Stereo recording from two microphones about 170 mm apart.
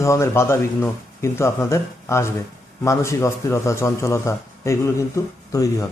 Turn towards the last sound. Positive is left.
turn(degrees=20)  # may be behind; listen again after turning